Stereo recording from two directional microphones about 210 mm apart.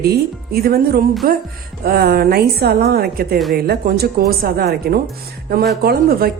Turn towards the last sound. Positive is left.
turn(degrees=-45)  # may be behind; listen again after turning